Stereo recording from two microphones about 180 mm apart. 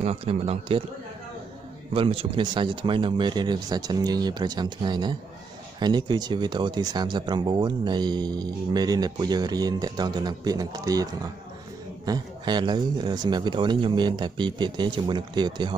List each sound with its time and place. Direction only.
0.0 s speech: 35° right (ahead or behind)
2.0 s speech: 30° right (ahead or behind)
12.1 s speech: 25° right (ahead or behind)